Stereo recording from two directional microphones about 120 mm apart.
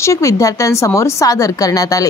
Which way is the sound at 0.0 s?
25° left (ahead or behind).